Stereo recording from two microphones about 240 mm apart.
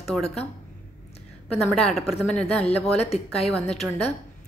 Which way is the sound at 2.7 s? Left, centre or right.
Left.